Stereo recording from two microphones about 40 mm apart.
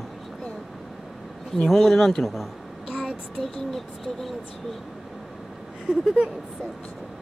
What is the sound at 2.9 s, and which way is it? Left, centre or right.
Child singing, right.